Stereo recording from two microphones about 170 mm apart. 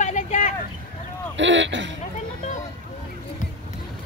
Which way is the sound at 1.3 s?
90° right.